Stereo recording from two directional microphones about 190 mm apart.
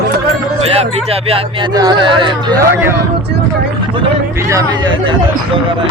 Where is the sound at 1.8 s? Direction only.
25° right (ahead or behind).